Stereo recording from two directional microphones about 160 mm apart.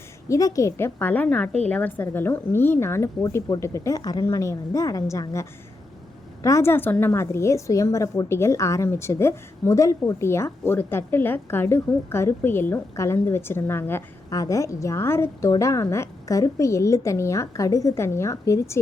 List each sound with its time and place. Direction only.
0.3 s a woman's voice: 20° left (ahead or behind)